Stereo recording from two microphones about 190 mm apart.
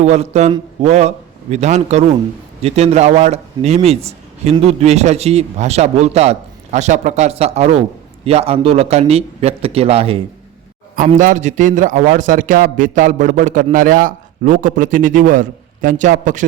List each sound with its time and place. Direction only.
0.0 s a man's voice: 35° right (ahead or behind)
10.9 s a man's voice: 45° right (ahead or behind)